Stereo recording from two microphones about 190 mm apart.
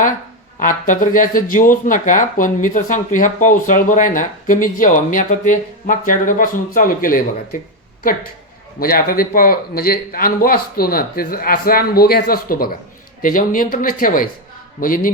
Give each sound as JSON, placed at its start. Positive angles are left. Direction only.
{"t": 0.6, "sound": "speech", "side_deg": 45}
{"t": 8.8, "sound": "speech", "side_deg": 50}